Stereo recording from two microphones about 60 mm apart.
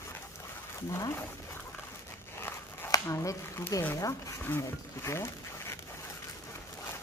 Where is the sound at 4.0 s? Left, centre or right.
Left.